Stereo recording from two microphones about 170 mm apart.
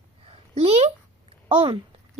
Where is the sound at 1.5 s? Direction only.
30° right (ahead or behind).